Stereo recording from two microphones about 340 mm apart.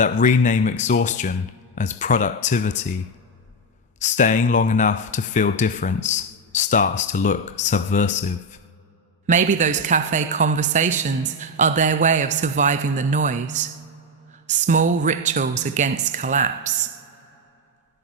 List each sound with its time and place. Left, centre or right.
0.0 s speech: left
4.0 s speech: left
9.2 s speech: right